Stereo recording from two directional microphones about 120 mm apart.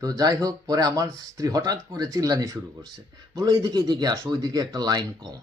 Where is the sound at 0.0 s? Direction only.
30° right (ahead or behind).